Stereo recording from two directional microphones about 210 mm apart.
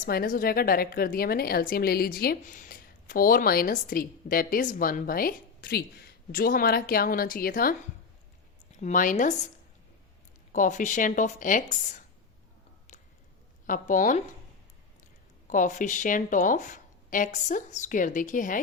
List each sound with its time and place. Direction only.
0.0 s speech: 45° left (ahead or behind)
8.8 s speech: 40° left (ahead or behind)
10.5 s speech: 35° left (ahead or behind)
13.7 s speech: 40° left (ahead or behind)
15.4 s speech: 35° left (ahead or behind)